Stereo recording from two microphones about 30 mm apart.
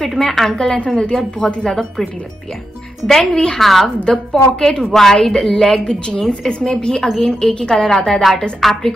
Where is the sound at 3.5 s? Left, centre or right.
Centre.